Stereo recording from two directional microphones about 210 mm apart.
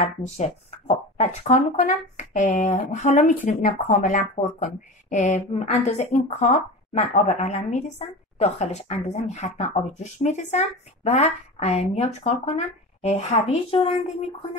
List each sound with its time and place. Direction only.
0.0 s speech: 30° left (ahead or behind)